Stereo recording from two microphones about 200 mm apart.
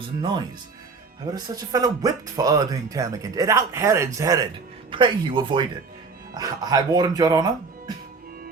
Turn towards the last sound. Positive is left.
turn(degrees=-20)  # may be behind; listen again after turning